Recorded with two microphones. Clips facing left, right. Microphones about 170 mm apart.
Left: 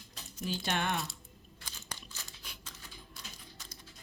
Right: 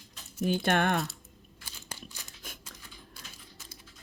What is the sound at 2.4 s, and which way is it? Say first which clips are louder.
Typewriter: right 8 dB; 50° right (ahead or behind).